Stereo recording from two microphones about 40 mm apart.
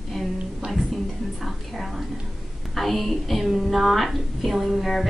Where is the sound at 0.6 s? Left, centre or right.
Right.